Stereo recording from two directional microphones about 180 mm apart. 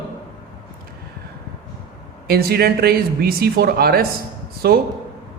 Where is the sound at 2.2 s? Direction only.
60° right (ahead or behind).